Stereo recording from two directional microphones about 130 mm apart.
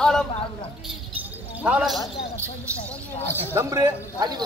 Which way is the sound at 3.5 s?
25° right (ahead or behind).